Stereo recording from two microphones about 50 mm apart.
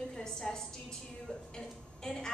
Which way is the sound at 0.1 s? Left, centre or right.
Centre.